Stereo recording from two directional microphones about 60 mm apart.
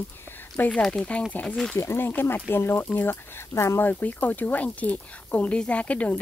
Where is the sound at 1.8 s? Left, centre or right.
Left.